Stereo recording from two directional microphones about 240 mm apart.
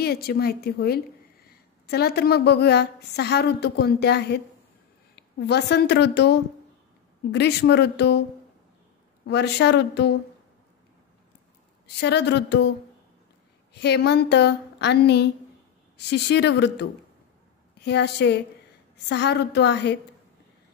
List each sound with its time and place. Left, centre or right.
0.0 s a woman's voice: left
9.2 s speech: left
12.0 s speech: left
13.7 s speech: left